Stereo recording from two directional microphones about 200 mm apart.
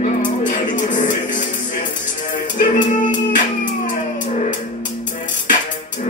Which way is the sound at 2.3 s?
40° left (ahead or behind).